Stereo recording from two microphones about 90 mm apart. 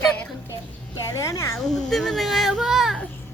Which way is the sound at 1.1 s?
40° left (ahead or behind).